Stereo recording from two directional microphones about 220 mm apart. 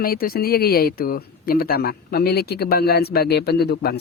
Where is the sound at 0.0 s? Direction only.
40° left (ahead or behind).